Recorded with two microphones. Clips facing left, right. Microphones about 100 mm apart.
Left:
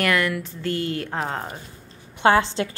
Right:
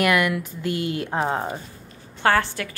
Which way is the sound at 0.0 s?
15° right (ahead or behind).